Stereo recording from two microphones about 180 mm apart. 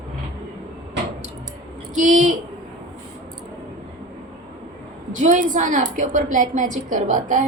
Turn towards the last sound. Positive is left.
turn(degrees=-45)  # may be behind; listen again after turning